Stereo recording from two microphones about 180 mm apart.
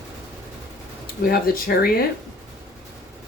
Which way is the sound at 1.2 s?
55° left (ahead or behind).